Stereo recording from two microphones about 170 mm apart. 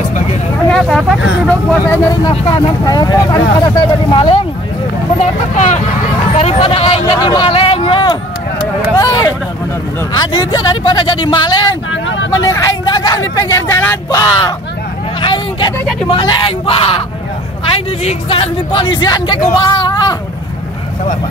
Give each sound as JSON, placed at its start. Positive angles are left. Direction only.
{"t": 0.7, "sound": "speech", "side_deg": 0}
{"t": 2.3, "sound": "speech", "side_deg": 25}
{"t": 5.2, "sound": "a man's voice", "side_deg": 45}
{"t": 11.9, "sound": "speech", "side_deg": 90}
{"t": 12.4, "sound": "a man's voice", "side_deg": 20}